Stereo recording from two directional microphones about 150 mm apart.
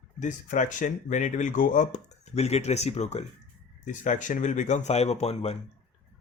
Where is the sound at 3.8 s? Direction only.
55° left (ahead or behind).